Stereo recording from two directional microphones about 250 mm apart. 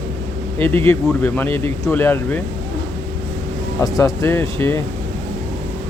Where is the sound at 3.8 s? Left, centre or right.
Centre.